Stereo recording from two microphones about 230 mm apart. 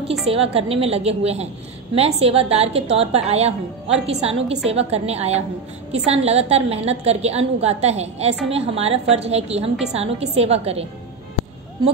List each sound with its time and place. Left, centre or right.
0.3 s a woman's voice: right